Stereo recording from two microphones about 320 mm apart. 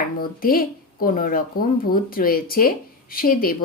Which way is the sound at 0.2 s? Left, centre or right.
Left.